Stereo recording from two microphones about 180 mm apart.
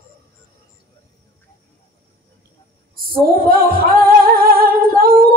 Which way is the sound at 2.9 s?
55° right (ahead or behind).